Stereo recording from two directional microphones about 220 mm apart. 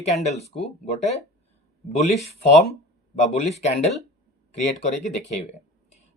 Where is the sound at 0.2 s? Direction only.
30° left (ahead or behind).